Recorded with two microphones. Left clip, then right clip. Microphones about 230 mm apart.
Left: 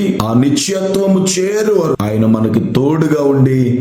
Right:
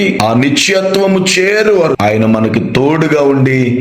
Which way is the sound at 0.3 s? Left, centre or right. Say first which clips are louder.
Right 4 dB; centre.